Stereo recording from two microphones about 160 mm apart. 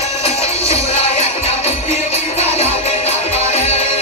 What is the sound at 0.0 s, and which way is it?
Music, 40° left (ahead or behind).